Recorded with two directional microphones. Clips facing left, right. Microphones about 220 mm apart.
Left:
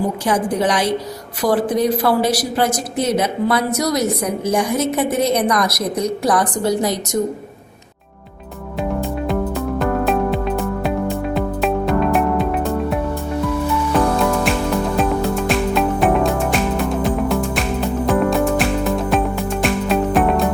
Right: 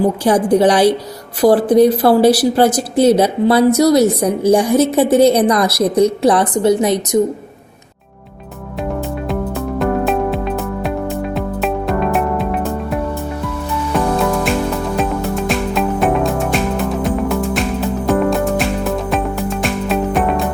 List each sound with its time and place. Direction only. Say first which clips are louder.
0.3 s a woman's voice: right 7 dB; 35° right (ahead or behind)
9.3 s music: right 1 dB; centre (ahead or behind)
13.9 s music: right 2 dB; centre (ahead or behind)